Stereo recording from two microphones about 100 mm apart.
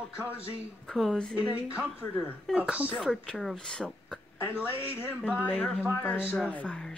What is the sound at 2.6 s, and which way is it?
Speech, 15° right (ahead or behind).